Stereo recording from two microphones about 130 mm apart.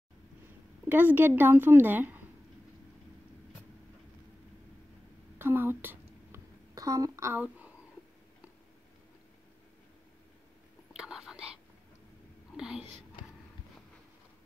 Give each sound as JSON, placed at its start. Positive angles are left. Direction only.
{"t": 0.8, "sound": "a woman's voice", "side_deg": -15}
{"t": 5.4, "sound": "a sound", "side_deg": -15}
{"t": 6.7, "sound": "a woman's voice", "side_deg": -25}
{"t": 7.4, "sound": "speech", "side_deg": -10}
{"t": 10.9, "sound": "whispering", "side_deg": -5}